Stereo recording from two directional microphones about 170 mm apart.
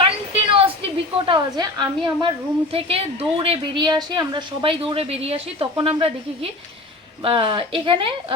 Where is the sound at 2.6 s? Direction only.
35° right (ahead or behind).